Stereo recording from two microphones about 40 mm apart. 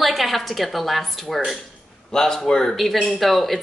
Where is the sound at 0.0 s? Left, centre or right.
Centre.